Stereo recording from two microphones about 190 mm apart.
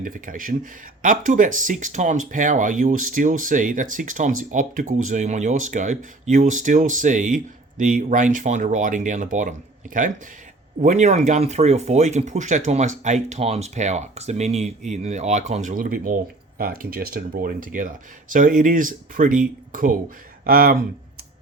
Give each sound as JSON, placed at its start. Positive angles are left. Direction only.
{"t": 0.0, "sound": "speech", "side_deg": -45}